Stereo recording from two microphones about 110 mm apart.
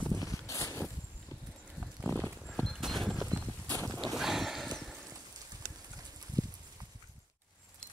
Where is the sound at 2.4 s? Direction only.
5° left (ahead or behind).